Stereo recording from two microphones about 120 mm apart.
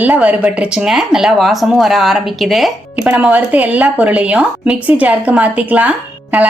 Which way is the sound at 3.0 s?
10° right (ahead or behind).